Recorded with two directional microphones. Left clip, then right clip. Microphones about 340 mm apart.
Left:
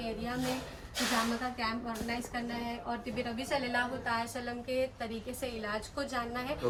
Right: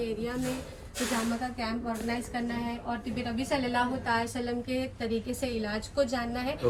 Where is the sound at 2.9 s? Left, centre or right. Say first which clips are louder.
Right 2 dB; centre.